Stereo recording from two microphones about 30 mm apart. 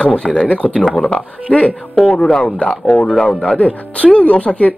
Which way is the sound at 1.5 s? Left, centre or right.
Left.